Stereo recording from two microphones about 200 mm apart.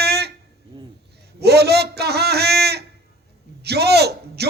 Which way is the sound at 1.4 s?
55° right (ahead or behind).